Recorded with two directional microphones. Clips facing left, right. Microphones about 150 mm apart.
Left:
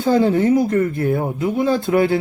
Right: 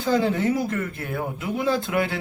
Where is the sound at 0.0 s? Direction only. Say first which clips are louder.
Left 6 dB; 35° left (ahead or behind).